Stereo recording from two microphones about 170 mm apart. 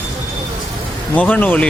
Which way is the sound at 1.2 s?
10° left (ahead or behind).